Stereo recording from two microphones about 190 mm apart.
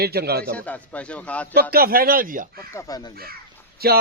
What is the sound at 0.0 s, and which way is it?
Speech, 55° right (ahead or behind).